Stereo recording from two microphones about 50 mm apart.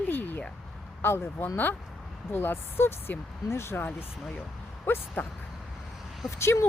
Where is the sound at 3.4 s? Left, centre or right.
Left.